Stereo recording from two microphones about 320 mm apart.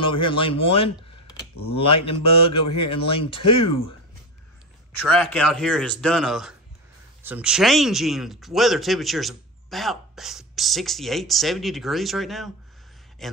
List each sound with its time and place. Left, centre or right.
0.0 s speech: centre
5.0 s a man's voice: centre